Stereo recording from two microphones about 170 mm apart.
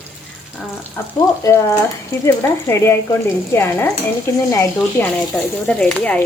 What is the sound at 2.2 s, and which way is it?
Speech, 15° left (ahead or behind).